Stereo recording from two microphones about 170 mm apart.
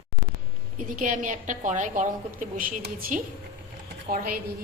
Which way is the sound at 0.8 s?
50° right (ahead or behind).